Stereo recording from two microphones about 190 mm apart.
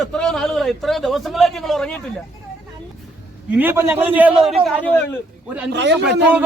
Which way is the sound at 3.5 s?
10° right (ahead or behind).